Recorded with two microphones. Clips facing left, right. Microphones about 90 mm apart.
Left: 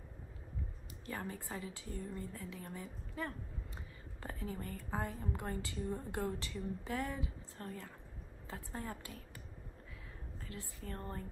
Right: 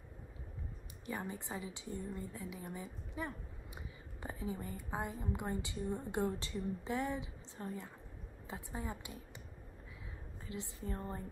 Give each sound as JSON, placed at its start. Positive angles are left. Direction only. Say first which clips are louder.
{"t": 1.0, "sound": "a woman's voice", "louder": "right 1 dB", "side_deg": -20}
{"t": 5.8, "sound": "a woman's voice", "louder": "left 1 dB", "side_deg": 0}
{"t": 6.1, "sound": "a woman's voice", "louder": "right 3 dB", "side_deg": -30}
{"t": 10.5, "sound": "a woman's voice", "louder": "right 4 dB", "side_deg": -25}